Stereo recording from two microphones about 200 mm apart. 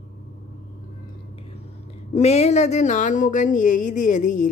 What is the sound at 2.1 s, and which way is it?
Speech, 30° left (ahead or behind).